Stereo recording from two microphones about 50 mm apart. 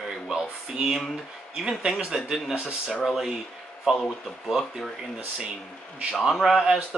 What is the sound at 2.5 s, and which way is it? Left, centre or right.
Speech, centre.